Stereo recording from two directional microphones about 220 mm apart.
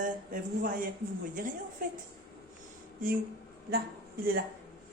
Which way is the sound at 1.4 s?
40° right (ahead or behind).